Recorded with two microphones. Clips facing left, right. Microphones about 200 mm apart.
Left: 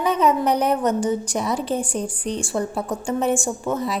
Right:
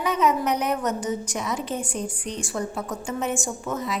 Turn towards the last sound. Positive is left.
turn(degrees=30)  # may be behind; listen again after turning